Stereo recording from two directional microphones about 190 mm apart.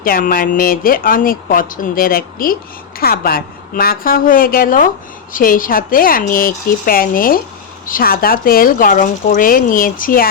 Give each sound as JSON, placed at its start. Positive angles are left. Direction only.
{"t": 0.0, "sound": "speech", "side_deg": 50}